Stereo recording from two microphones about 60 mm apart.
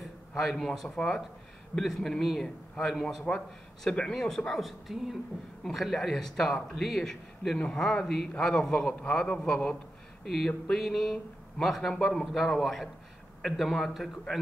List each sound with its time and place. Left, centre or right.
0.4 s a man's voice: centre
0.8 s a man's voice: centre
3.3 s a man's voice: centre
10.3 s a man's voice: centre